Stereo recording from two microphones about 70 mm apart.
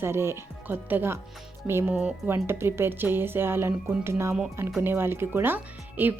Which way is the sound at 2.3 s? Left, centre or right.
Right.